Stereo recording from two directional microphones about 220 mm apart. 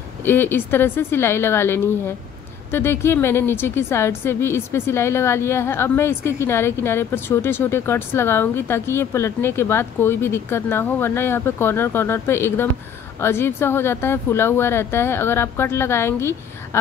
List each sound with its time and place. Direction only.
0.2 s a woman's voice: 10° left (ahead or behind)